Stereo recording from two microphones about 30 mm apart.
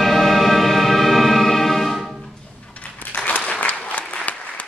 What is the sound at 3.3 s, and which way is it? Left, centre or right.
Applause, left.